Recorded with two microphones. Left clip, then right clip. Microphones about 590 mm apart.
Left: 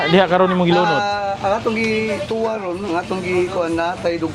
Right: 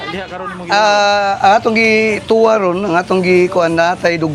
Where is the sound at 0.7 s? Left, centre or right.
Right.